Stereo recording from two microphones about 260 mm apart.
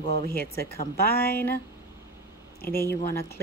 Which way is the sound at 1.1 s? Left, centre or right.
Centre.